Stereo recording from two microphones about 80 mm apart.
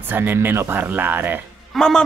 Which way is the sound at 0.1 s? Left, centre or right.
Right.